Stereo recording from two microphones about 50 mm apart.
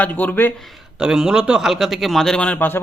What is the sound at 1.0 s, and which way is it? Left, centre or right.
A man's voice, centre.